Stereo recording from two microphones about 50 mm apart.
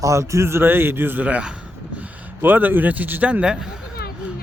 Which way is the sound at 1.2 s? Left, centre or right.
Right.